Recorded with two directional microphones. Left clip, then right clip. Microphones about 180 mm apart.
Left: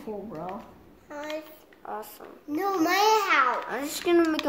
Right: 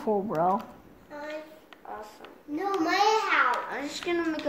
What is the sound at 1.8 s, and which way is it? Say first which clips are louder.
Speech: left 4 dB; 40° left (ahead or behind).